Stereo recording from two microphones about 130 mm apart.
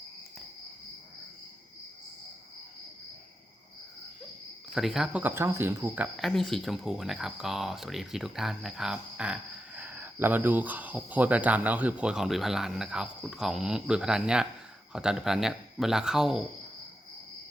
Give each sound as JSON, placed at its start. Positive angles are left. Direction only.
{"t": 4.7, "sound": "speech", "side_deg": -5}
{"t": 5.2, "sound": "speech", "side_deg": -20}
{"t": 6.1, "sound": "speech", "side_deg": 0}